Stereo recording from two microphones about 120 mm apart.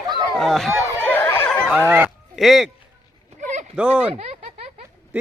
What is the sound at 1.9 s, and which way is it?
Speech, 15° right (ahead or behind).